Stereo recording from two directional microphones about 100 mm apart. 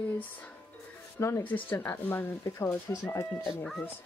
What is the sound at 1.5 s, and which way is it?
Speech, 20° left (ahead or behind).